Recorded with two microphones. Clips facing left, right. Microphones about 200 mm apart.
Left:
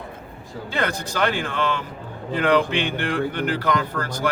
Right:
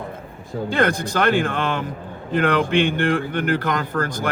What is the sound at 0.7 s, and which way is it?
Speech, 50° right (ahead or behind).